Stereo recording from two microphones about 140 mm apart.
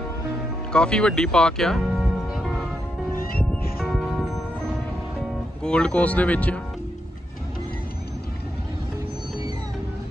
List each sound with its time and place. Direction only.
0.7 s speech: 5° left (ahead or behind)
2.3 s music: centre (ahead or behind)
3.8 s music: centre (ahead or behind)
5.6 s speech: 5° left (ahead or behind)